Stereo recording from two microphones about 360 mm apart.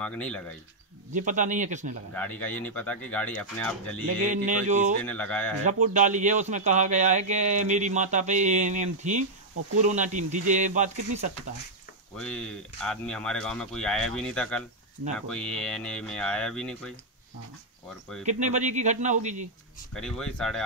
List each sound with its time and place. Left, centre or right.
0.0 s speech: centre
1.1 s a man's voice: right
2.1 s speech: centre
4.2 s a man's voice: centre
5.0 s speech: centre
5.7 s a man's voice: right
12.2 s speech: centre
18.2 s a man's voice: centre
19.9 s speech: centre